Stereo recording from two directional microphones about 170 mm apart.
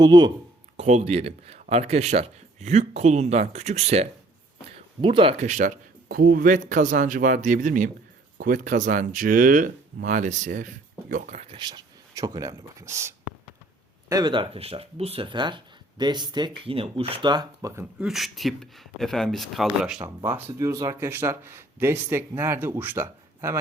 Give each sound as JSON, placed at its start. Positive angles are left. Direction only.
{"t": 0.0, "sound": "speech", "side_deg": -25}
{"t": 0.8, "sound": "speech", "side_deg": -40}
{"t": 4.7, "sound": "a sound", "side_deg": -30}
{"t": 5.5, "sound": "speech", "side_deg": -50}
{"t": 11.5, "sound": "speech", "side_deg": -25}
{"t": 18.0, "sound": "speech", "side_deg": 0}
{"t": 20.1, "sound": "speech", "side_deg": -15}